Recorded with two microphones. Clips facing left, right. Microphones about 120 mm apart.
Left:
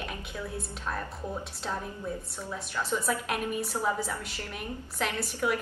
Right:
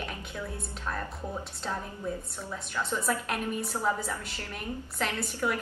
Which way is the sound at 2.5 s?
10° left (ahead or behind).